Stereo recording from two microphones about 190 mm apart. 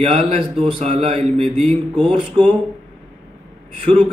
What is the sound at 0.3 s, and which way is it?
A man's voice, 30° right (ahead or behind).